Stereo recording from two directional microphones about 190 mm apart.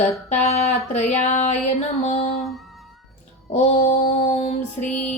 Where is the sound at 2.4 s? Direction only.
Centre (ahead or behind).